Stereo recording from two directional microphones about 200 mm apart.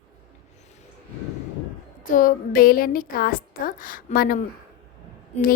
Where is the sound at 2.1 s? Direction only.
45° left (ahead or behind).